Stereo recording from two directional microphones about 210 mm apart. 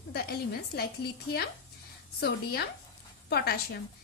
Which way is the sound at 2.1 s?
50° left (ahead or behind).